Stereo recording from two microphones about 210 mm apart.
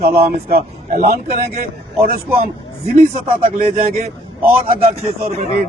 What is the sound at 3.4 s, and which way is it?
Speech, 40° right (ahead or behind).